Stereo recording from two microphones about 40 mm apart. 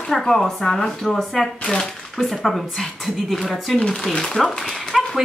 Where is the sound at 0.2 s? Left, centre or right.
Centre.